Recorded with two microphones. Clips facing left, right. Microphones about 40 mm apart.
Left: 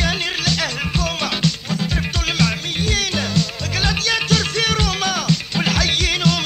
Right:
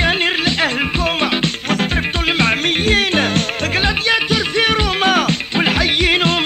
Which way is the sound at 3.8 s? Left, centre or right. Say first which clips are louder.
Right 2 dB; right.